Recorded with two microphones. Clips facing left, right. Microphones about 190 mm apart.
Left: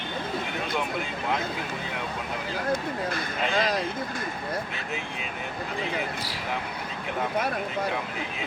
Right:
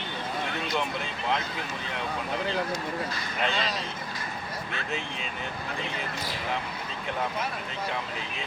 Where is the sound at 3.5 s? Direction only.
55° left (ahead or behind).